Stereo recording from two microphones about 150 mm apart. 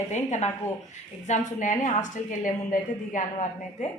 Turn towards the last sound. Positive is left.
turn(degrees=55)  # may be behind; listen again after turning